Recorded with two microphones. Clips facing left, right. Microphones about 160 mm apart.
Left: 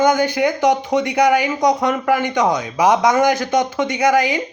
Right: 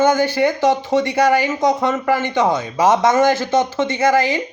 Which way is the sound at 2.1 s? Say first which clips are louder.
Even; 15° left (ahead or behind).